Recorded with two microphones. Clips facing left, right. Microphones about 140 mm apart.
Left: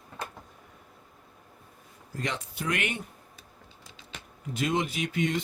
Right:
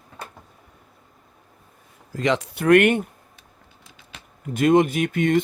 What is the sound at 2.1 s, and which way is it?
Speech, 90° right.